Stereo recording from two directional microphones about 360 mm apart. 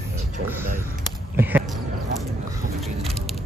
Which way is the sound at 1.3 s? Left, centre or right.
Centre.